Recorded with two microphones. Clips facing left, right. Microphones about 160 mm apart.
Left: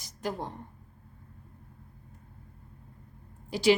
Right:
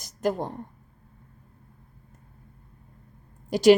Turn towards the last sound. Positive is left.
turn(degrees=-45)  # may be behind; listen again after turning